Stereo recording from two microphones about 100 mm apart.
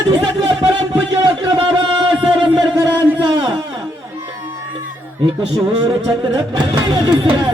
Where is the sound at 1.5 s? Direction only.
55° right (ahead or behind).